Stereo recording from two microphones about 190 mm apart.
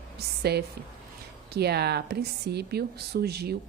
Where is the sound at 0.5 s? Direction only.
60° right (ahead or behind).